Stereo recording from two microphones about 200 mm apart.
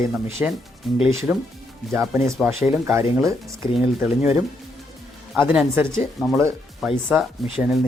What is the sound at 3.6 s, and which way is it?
Speech, 25° left (ahead or behind).